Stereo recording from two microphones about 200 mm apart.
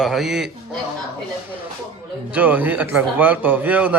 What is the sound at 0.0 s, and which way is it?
Speech, centre (ahead or behind).